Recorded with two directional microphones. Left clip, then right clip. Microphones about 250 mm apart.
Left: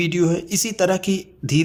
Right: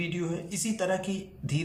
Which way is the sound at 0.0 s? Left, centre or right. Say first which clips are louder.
Left 13 dB; left.